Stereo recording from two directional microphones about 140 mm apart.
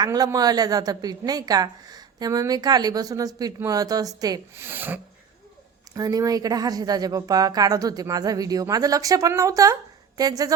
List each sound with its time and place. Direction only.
0.0 s a woman's voice: 25° right (ahead or behind)
4.6 s speech: 15° right (ahead or behind)
5.9 s a woman's voice: 25° right (ahead or behind)